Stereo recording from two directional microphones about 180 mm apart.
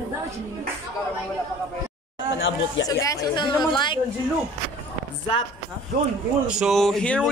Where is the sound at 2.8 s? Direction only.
20° left (ahead or behind).